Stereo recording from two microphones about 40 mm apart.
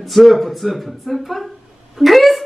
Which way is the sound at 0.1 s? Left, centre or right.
Centre.